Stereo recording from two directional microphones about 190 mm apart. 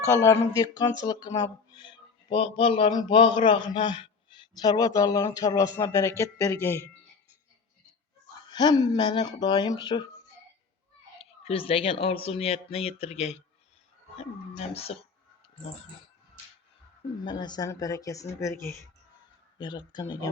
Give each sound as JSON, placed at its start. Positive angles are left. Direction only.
{"t": 0.0, "sound": "speech", "side_deg": 15}
{"t": 8.4, "sound": "speech", "side_deg": 20}
{"t": 11.2, "sound": "speech", "side_deg": 30}
{"t": 17.2, "sound": "speech", "side_deg": 20}